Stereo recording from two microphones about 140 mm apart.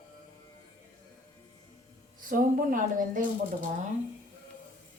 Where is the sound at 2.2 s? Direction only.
80° right.